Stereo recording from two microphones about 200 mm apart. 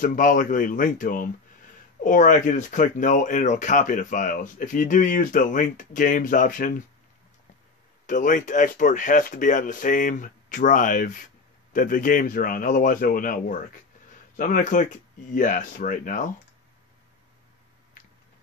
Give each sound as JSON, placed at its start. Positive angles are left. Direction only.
{"t": 0.0, "sound": "speech", "side_deg": 40}
{"t": 8.1, "sound": "speech", "side_deg": 40}